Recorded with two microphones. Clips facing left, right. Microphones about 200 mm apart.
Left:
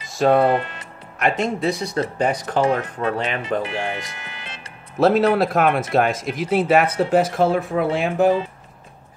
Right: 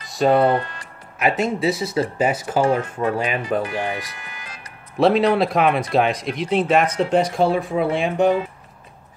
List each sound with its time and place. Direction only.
0.0 s music: centre (ahead or behind)
0.5 s speech: 20° left (ahead or behind)
1.2 s speech: 5° right (ahead or behind)
3.6 s speech: 25° left (ahead or behind)
4.9 s speech: centre (ahead or behind)